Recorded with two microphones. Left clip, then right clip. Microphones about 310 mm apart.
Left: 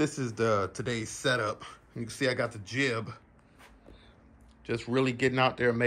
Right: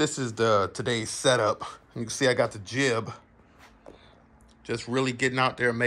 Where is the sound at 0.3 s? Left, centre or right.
Centre.